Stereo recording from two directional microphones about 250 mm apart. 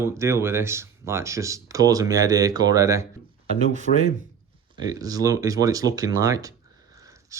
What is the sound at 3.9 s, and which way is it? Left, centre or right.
Speech, left.